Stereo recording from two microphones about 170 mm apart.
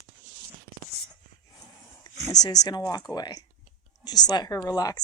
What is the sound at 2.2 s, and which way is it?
Speech, 20° left (ahead or behind).